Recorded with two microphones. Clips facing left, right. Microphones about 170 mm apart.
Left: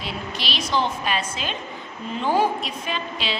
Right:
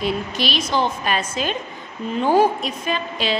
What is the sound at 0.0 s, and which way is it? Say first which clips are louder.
A woman's voice: right 8 dB; 50° right (ahead or behind).